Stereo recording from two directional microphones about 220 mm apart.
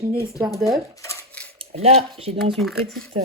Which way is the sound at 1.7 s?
25° right (ahead or behind).